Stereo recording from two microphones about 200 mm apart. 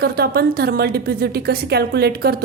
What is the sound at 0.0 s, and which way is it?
A woman's voice, 50° right (ahead or behind).